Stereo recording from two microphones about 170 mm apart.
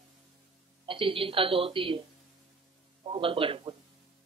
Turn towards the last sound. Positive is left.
turn(degrees=-30)  # may be behind; listen again after turning